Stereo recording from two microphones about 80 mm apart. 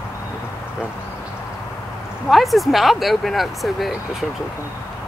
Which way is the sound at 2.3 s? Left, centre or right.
Centre.